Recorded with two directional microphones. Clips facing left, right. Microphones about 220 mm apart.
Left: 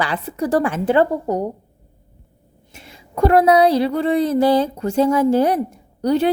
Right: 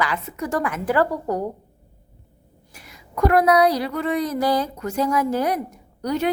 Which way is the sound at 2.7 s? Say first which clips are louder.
Left 3 dB; 25° left (ahead or behind).